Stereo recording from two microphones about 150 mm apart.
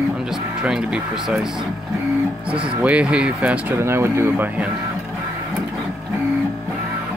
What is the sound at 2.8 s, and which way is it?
Speech, 10° right (ahead or behind).